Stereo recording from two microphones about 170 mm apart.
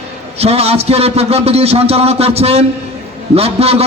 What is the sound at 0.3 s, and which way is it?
A man's voice, 35° right (ahead or behind).